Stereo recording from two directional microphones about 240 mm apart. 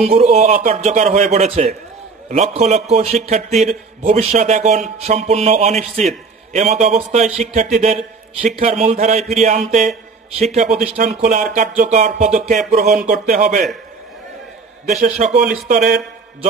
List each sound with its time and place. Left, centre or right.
0.0 s a man's voice: right
14.9 s speech: right